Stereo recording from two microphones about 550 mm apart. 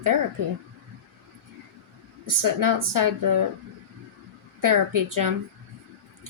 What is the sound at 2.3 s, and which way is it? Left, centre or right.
Speech, right.